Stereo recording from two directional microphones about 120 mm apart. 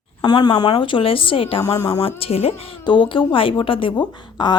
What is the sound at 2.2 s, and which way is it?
A woman's voice, 55° left (ahead or behind).